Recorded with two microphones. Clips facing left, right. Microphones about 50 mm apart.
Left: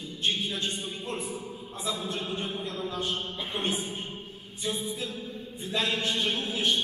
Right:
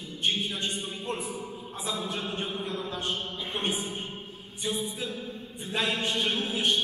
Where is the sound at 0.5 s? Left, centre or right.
Centre.